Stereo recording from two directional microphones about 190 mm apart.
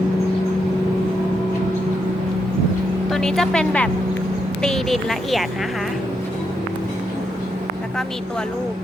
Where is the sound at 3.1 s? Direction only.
Centre (ahead or behind).